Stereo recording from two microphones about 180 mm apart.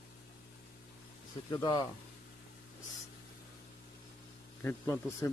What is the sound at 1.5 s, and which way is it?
Speech, 20° left (ahead or behind).